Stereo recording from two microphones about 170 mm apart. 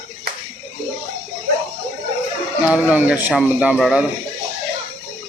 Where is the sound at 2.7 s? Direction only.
10° right (ahead or behind).